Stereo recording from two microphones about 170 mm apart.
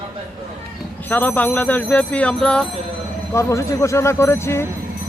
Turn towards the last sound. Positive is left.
turn(degrees=15)  # may be behind; listen again after turning